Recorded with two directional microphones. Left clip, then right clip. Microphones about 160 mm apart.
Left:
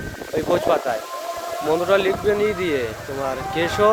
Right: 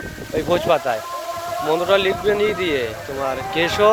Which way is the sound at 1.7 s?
30° left (ahead or behind).